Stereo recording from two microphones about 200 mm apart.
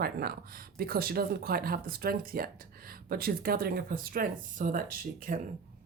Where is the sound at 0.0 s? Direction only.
50° right (ahead or behind).